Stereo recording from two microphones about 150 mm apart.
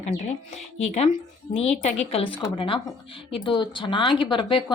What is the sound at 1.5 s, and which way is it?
Speech, 45° left (ahead or behind).